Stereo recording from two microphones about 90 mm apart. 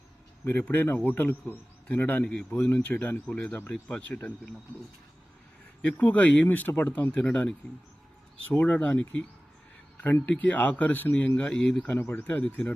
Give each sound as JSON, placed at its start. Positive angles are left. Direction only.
{"t": 0.4, "sound": "speech", "side_deg": 20}
{"t": 5.8, "sound": "speech", "side_deg": 15}